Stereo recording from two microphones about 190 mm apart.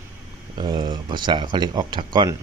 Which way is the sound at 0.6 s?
20° right (ahead or behind).